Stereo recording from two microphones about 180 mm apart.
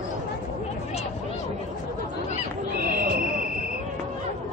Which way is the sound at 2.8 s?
55° right (ahead or behind).